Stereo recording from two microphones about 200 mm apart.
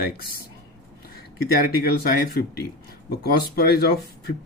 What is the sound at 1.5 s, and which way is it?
Speech, 50° left (ahead or behind).